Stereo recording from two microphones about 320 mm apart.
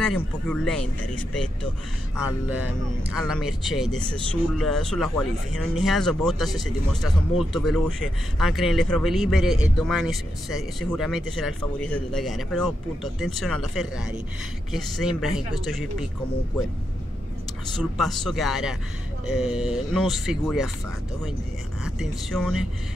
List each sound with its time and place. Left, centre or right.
0.0 s speech: centre
17.7 s speech: centre
21.8 s speech: centre